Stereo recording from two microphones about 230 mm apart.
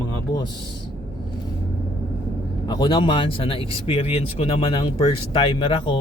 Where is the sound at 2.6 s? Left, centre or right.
Centre.